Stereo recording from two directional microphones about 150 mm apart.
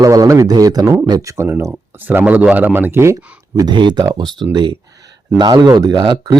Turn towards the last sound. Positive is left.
turn(degrees=-30)  # may be behind; listen again after turning